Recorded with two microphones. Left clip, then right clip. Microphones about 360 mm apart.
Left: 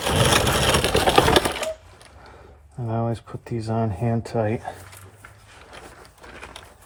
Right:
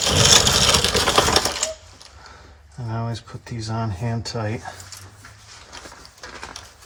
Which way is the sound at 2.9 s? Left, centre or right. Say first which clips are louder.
Left 4 dB; left.